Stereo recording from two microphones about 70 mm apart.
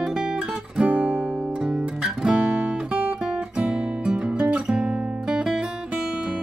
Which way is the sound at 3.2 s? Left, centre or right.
Centre.